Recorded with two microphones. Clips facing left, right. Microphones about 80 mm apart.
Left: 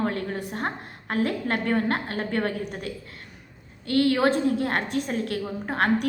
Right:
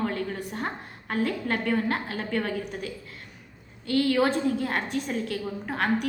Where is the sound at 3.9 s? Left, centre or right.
Left.